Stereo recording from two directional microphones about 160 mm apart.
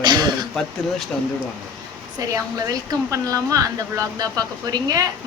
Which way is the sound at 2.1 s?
20° right (ahead or behind).